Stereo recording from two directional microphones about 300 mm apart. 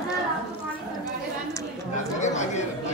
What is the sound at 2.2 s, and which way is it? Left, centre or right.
Chatter, left.